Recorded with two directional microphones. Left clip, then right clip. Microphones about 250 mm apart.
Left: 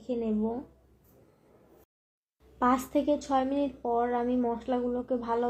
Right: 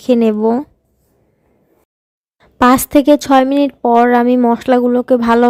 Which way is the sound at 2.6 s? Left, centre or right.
Right.